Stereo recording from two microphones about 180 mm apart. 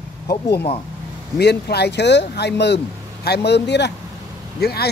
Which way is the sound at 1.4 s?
65° left (ahead or behind).